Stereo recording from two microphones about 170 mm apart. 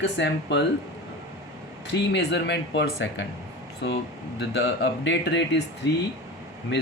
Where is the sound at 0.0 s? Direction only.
90° left.